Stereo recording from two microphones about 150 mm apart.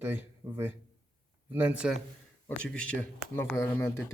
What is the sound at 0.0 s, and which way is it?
A man's voice, 15° right (ahead or behind).